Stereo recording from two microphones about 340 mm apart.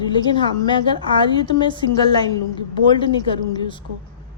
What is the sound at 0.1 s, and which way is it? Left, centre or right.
A woman's voice, centre.